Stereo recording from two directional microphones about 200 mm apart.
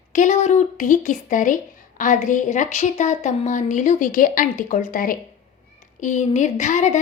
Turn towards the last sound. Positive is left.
turn(degrees=35)  # may be behind; listen again after turning